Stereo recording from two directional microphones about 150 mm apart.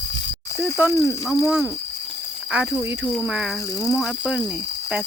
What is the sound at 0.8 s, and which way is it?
Speech, 10° right (ahead or behind).